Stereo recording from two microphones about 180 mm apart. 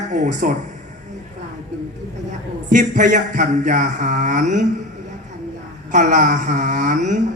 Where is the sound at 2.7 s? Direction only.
45° right (ahead or behind).